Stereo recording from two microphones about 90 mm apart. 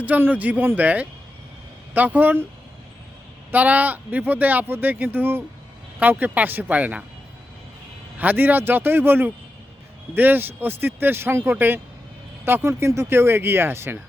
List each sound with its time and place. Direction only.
0.0 s speech: 20° right (ahead or behind)
3.5 s speech: 15° right (ahead or behind)
8.2 s speech: 20° right (ahead or behind)